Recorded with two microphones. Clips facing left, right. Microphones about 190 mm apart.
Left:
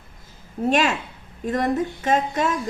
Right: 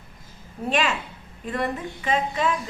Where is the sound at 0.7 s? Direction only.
45° left (ahead or behind).